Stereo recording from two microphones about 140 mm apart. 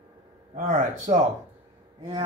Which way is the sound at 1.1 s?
55° right (ahead or behind).